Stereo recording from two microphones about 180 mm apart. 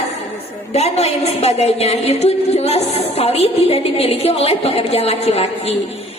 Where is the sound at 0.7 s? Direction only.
35° left (ahead or behind).